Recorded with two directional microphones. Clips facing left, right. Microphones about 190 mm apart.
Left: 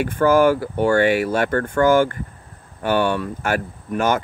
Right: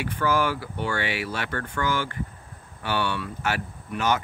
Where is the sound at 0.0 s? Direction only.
50° left (ahead or behind).